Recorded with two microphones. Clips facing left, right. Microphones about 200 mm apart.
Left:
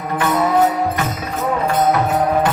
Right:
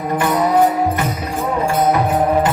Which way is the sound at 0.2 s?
15° right (ahead or behind).